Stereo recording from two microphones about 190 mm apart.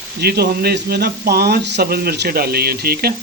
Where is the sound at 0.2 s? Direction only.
55° right (ahead or behind).